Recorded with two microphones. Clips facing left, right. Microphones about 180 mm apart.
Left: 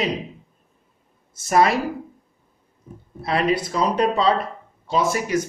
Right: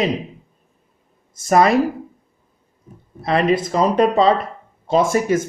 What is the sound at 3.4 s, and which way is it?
Speech, 50° right (ahead or behind).